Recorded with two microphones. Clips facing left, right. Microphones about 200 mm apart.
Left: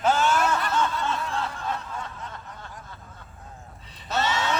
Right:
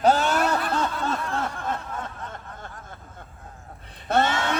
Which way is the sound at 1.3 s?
55° right (ahead or behind).